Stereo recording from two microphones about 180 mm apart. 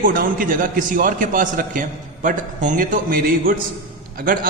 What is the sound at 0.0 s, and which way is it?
A man's voice, 50° right (ahead or behind).